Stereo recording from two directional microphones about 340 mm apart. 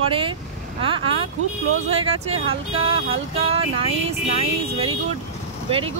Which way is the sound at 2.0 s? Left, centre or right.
Centre.